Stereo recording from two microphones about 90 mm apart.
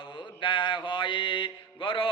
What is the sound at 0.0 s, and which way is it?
Mantra, 55° left (ahead or behind).